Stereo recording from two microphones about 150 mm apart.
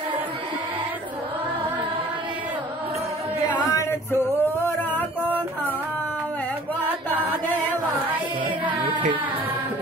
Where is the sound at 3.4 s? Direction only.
25° left (ahead or behind).